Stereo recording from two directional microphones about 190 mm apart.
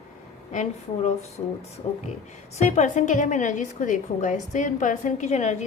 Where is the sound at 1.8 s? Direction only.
30° left (ahead or behind).